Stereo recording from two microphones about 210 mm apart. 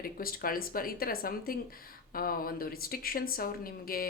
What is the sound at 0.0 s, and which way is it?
Speech, 45° left (ahead or behind).